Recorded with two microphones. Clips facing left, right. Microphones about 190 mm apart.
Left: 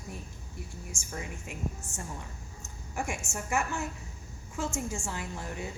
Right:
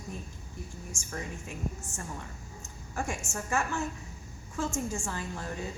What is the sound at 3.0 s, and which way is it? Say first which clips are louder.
Speech: even; 10° left (ahead or behind).